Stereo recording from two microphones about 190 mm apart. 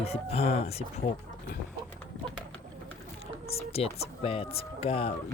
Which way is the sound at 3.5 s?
30° left (ahead or behind).